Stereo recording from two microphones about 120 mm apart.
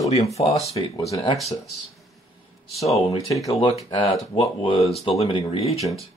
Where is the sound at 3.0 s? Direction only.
30° left (ahead or behind).